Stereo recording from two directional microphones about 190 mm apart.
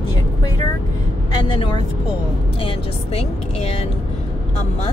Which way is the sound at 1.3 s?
25° left (ahead or behind).